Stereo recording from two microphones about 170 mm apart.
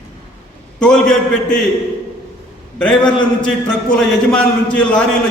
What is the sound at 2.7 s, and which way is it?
A man's voice, 5° left (ahead or behind).